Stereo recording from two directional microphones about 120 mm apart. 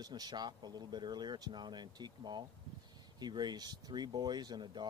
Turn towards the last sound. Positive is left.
turn(degrees=-40)  # may be behind; listen again after turning